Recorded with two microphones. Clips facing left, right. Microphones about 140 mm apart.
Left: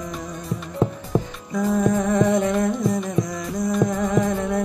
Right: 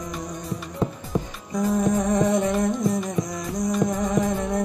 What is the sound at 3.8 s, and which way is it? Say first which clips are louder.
Music: left 2 dB; 20° right (ahead or behind).